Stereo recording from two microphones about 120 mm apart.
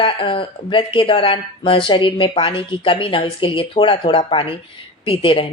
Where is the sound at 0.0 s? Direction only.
45° left (ahead or behind).